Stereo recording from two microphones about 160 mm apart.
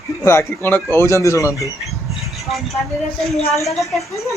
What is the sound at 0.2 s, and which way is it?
Speech, 15° left (ahead or behind).